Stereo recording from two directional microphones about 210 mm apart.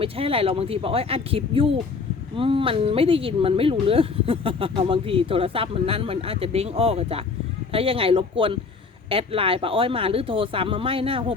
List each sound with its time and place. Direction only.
0.0 s speech: 25° right (ahead or behind)